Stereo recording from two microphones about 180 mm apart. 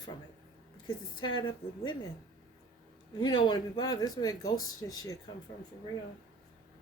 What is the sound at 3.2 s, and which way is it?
Speech, 25° left (ahead or behind).